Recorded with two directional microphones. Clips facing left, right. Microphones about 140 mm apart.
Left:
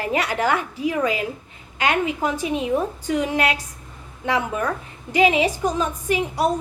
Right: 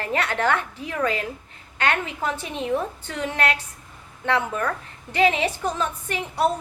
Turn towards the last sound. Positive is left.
turn(degrees=10)  # may be behind; listen again after turning